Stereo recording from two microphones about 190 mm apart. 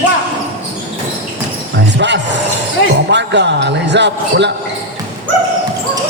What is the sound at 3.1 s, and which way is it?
Speech, 65° right (ahead or behind).